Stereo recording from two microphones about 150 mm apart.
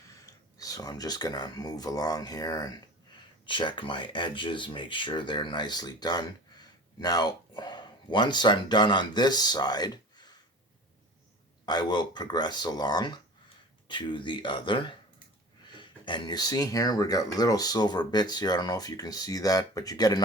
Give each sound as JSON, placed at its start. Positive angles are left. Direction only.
{"t": 0.1, "sound": "speech", "side_deg": 20}
{"t": 11.6, "sound": "speech", "side_deg": 30}